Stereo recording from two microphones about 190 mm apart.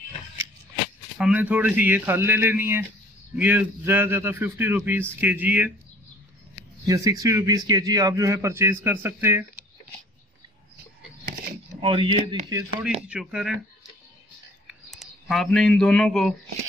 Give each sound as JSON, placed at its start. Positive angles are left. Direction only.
{"t": 1.1, "sound": "a man's voice", "side_deg": -5}
{"t": 6.9, "sound": "a man's voice", "side_deg": -20}
{"t": 11.8, "sound": "speech", "side_deg": -25}
{"t": 13.1, "sound": "speech", "side_deg": -5}
{"t": 14.7, "sound": "speech", "side_deg": 0}